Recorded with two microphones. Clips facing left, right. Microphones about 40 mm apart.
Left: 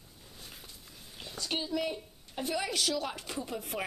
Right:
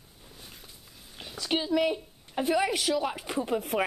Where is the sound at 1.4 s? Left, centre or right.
Right.